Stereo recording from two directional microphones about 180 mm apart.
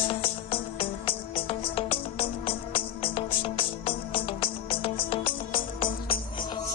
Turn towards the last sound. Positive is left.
turn(degrees=30)  # may be behind; listen again after turning